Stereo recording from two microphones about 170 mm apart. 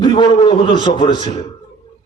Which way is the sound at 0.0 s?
25° left (ahead or behind).